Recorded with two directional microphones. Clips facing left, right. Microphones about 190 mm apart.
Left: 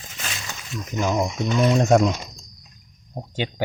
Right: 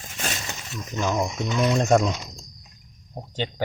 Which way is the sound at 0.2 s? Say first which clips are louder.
Right 3 dB; 40° right (ahead or behind).